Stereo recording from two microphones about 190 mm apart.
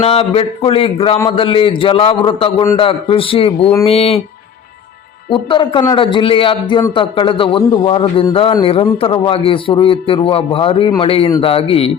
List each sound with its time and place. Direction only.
0.0 s a man's voice: 30° left (ahead or behind)
5.3 s a man's voice: 25° left (ahead or behind)